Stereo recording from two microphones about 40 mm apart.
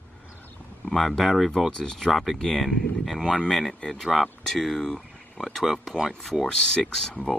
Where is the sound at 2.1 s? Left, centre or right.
Centre.